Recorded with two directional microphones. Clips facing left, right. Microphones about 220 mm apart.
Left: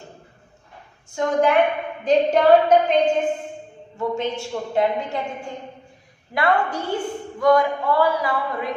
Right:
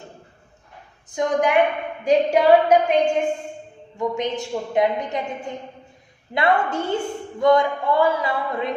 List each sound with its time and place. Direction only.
1.1 s a woman's voice: 15° right (ahead or behind)